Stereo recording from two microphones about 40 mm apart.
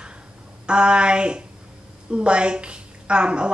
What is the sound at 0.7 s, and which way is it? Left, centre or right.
A woman's voice, right.